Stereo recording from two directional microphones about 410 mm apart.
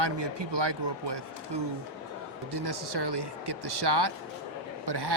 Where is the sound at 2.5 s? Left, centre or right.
Right.